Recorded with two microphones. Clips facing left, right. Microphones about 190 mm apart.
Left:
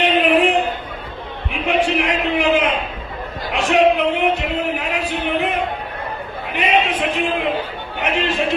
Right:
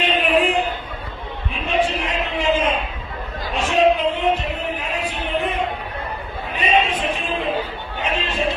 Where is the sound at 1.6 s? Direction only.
90° left.